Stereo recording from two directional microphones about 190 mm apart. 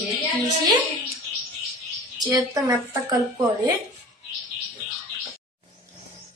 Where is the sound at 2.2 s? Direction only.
20° right (ahead or behind).